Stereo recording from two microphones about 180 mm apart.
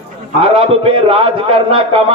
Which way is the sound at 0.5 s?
30° right (ahead or behind).